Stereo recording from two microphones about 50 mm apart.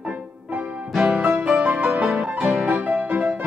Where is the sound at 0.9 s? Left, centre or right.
Centre.